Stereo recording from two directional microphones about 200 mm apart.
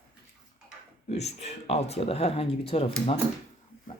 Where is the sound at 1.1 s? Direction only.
30° left (ahead or behind).